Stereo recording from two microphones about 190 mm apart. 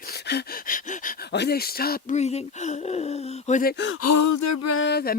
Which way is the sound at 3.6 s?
70° left (ahead or behind).